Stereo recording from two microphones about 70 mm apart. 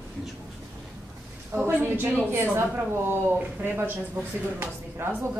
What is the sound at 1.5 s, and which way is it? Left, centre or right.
Speech, right.